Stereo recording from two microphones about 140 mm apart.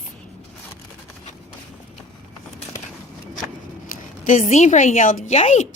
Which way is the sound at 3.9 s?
70° left (ahead or behind).